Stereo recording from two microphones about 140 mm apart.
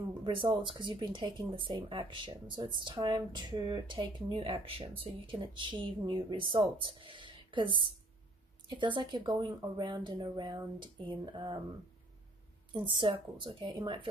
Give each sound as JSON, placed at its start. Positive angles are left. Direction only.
{"t": 0.2, "sound": "speech", "side_deg": -35}
{"t": 12.7, "sound": "speech", "side_deg": -35}